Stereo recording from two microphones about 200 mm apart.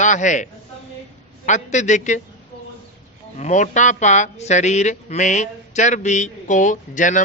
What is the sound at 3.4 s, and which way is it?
Speech, 35° left (ahead or behind).